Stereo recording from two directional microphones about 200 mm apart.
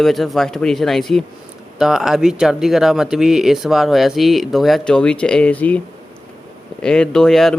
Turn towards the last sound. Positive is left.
turn(degrees=0)  # may be behind; listen again after turning